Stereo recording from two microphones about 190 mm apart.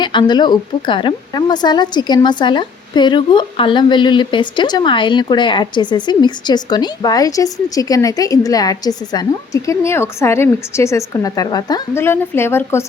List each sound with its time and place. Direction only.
0.0 s a woman's voice: 25° left (ahead or behind)